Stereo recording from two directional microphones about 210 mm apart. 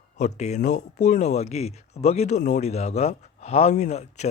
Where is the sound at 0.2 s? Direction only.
30° left (ahead or behind).